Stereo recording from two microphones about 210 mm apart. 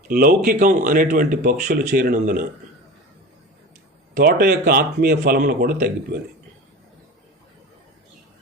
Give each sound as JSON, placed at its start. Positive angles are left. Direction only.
{"t": 0.1, "sound": "speech", "side_deg": -45}
{"t": 4.1, "sound": "speech", "side_deg": -45}